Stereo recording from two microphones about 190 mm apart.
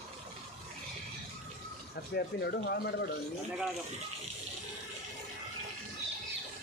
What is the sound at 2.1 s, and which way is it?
Speech, 60° left (ahead or behind).